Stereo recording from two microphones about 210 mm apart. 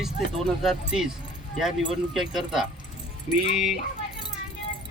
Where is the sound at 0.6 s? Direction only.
Centre (ahead or behind).